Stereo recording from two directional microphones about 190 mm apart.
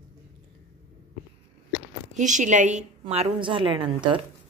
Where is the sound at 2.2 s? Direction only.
40° right (ahead or behind).